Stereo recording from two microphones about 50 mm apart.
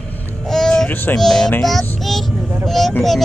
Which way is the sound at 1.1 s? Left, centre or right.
Centre.